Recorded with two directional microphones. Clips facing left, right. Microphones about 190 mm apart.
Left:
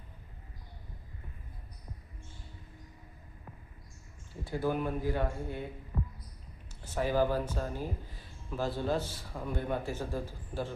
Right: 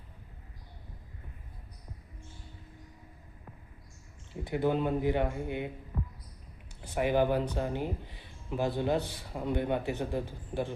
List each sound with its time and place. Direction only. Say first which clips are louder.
4.4 s speech: right 3 dB; 20° right (ahead or behind)
6.8 s a man's voice: right 2 dB; 15° right (ahead or behind)